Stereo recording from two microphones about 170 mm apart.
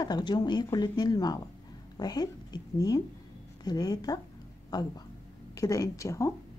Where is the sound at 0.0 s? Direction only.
25° left (ahead or behind).